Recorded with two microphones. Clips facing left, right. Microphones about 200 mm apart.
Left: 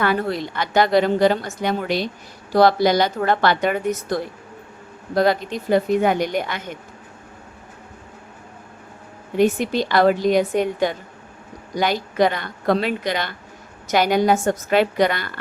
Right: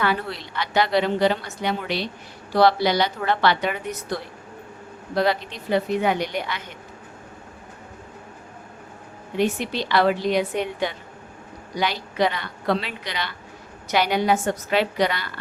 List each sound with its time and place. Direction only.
0.0 s a woman's voice: 45° left (ahead or behind)
9.4 s a woman's voice: 45° left (ahead or behind)